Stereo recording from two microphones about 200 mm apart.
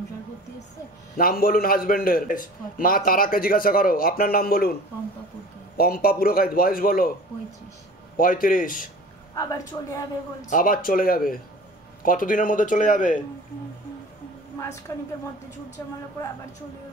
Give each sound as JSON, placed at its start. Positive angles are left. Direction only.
{"t": 1.1, "sound": "a man's voice", "side_deg": 45}
{"t": 5.8, "sound": "a man's voice", "side_deg": 50}
{"t": 8.2, "sound": "a man's voice", "side_deg": 45}
{"t": 9.3, "sound": "a woman's voice", "side_deg": 15}
{"t": 10.5, "sound": "a man's voice", "side_deg": 45}
{"t": 14.9, "sound": "a woman's voice", "side_deg": 10}